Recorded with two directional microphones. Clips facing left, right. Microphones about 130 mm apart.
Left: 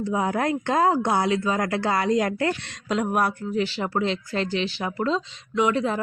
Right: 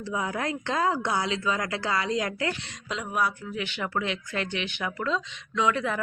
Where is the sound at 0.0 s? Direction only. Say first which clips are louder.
Left 6 dB; 40° left (ahead or behind).